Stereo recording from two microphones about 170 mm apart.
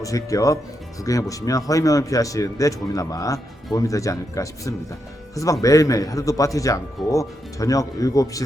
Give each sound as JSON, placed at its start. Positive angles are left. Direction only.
{"t": 0.0, "sound": "speech", "side_deg": 20}